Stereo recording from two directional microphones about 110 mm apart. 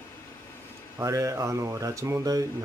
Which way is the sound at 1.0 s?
30° right (ahead or behind).